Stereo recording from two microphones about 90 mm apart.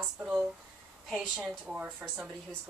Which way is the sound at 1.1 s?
5° right (ahead or behind).